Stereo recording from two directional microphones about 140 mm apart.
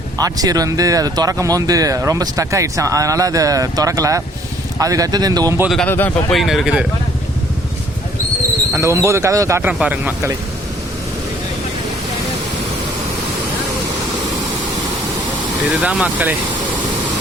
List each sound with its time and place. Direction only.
0.2 s speech: 25° right (ahead or behind)
5.6 s speech: centre (ahead or behind)
5.9 s speech: 15° left (ahead or behind)
6.3 s speech: centre (ahead or behind)
8.7 s speech: 20° right (ahead or behind)
15.8 s speech: 10° right (ahead or behind)